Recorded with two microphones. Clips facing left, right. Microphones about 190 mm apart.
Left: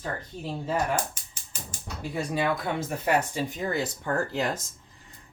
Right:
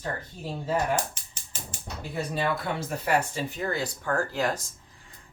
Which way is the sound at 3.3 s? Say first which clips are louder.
Left 1 dB; 20° left (ahead or behind).